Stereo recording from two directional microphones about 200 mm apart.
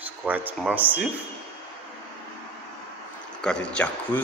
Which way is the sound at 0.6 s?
10° right (ahead or behind).